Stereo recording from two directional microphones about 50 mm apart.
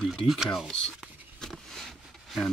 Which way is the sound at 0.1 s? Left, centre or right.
Centre.